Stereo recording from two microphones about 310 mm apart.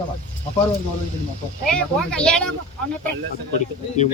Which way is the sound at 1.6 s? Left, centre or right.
Centre.